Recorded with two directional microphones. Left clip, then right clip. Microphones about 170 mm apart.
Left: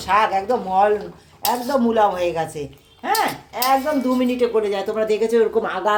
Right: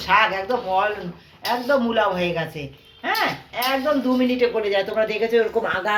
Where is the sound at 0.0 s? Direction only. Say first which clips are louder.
Left 1 dB; 80° left.